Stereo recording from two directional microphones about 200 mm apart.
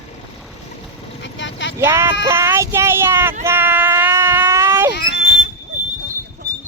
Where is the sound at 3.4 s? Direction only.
10° right (ahead or behind).